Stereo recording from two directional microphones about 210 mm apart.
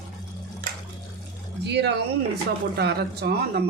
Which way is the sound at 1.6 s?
55° right (ahead or behind).